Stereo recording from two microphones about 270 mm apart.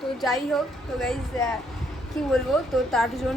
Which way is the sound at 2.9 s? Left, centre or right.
Centre.